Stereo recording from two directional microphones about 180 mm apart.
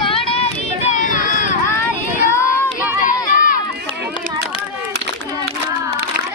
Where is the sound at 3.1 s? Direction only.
50° left (ahead or behind).